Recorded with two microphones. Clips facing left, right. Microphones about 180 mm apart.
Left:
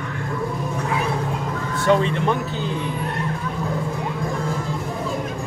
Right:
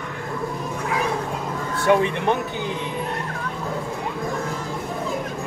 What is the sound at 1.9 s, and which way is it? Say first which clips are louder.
Speech: even; 15° right (ahead or behind).